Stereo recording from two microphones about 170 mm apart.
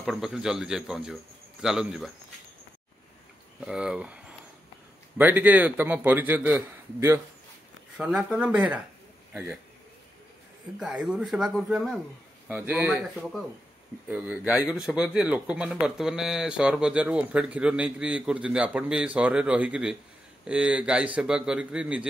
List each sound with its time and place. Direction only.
0.0 s speech: centre (ahead or behind)
3.6 s a man's voice: 5° right (ahead or behind)
10.8 s speech: 5° right (ahead or behind)
12.4 s speech: 10° right (ahead or behind)
13.2 s speech: centre (ahead or behind)